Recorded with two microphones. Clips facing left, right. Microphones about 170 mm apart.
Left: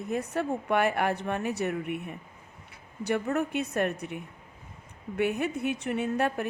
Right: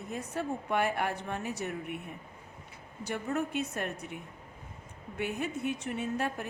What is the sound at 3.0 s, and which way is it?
A woman's voice, 65° left (ahead or behind).